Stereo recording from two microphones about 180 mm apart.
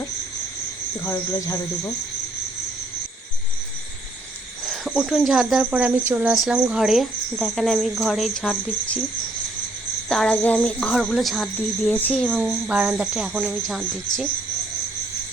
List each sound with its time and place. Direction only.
1.5 s speech: 20° left (ahead or behind)
4.6 s speech: centre (ahead or behind)
10.1 s speech: 5° left (ahead or behind)
12.4 s speech: 5° right (ahead or behind)